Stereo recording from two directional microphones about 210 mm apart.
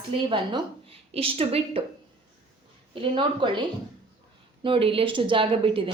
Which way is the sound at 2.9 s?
25° right (ahead or behind).